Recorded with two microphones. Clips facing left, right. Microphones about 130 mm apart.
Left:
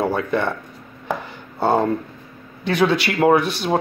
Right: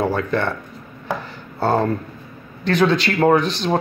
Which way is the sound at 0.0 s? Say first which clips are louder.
Even; 15° left (ahead or behind).